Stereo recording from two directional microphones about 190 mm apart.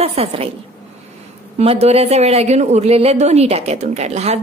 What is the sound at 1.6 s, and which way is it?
Speech, 30° right (ahead or behind).